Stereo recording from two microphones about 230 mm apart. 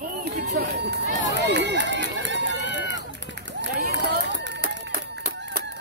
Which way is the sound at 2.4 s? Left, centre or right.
Left.